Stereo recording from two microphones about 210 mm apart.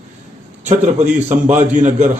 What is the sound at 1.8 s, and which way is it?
Speech, 35° right (ahead or behind).